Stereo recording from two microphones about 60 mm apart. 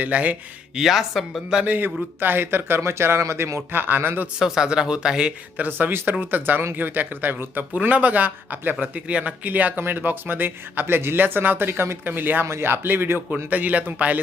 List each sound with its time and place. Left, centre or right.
0.0 s speech: right
0.8 s speech: centre
1.6 s speech: right
3.8 s speech: right
4.4 s speech: centre
5.8 s speech: right
12.5 s speech: right
13.3 s speech: right